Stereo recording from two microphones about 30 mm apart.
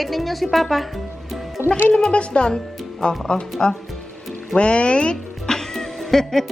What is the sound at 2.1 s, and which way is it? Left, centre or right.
Speech, left.